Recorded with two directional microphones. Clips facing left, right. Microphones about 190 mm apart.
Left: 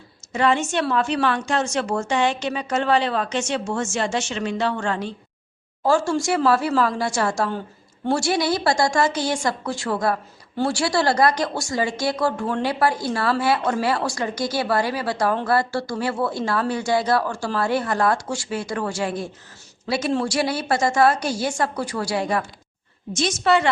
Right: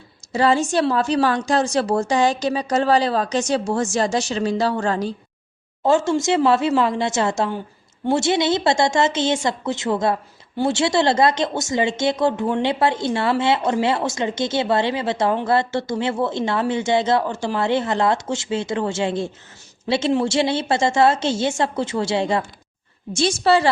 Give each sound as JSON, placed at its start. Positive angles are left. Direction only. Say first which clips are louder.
{"t": 0.3, "sound": "a woman's voice", "louder": "right 3 dB", "side_deg": -35}
{"t": 5.8, "sound": "a woman's voice", "louder": "right 2 dB", "side_deg": -20}